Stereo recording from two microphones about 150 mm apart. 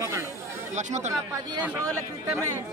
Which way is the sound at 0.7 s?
50° right (ahead or behind).